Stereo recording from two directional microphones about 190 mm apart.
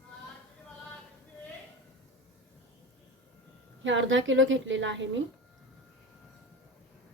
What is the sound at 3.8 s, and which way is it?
Speech, 75° right (ahead or behind).